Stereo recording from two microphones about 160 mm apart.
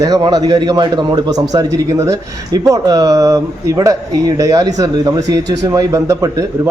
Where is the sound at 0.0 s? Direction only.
25° right (ahead or behind).